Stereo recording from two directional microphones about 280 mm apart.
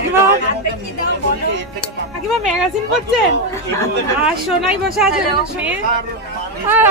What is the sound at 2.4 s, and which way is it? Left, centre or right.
Speech, centre.